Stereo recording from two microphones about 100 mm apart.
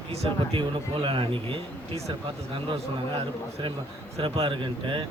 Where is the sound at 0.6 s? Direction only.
60° right (ahead or behind).